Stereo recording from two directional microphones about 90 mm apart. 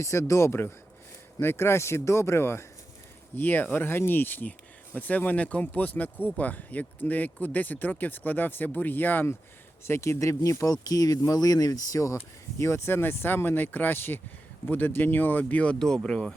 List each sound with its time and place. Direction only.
0.0 s speech: 35° left (ahead or behind); by 16.3 s 10° left (ahead or behind)